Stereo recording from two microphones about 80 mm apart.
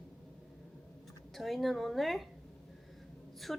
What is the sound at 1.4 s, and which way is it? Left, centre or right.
Speech, centre.